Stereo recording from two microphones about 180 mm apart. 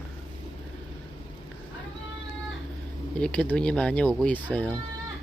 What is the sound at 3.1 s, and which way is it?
Speech, 5° left (ahead or behind).